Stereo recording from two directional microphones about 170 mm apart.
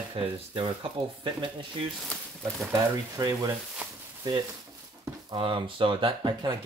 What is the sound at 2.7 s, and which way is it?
Speech, 20° right (ahead or behind).